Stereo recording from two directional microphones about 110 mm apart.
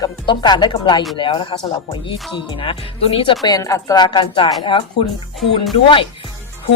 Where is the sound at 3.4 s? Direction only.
35° left (ahead or behind); by 6.1 s 55° left (ahead or behind).